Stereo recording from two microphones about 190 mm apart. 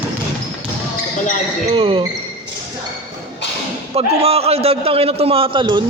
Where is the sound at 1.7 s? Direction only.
30° right (ahead or behind).